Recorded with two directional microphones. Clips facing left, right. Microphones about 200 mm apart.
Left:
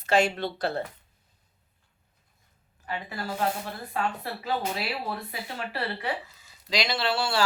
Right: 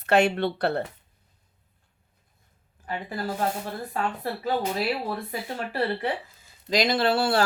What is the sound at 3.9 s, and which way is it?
A woman's voice, 45° right (ahead or behind).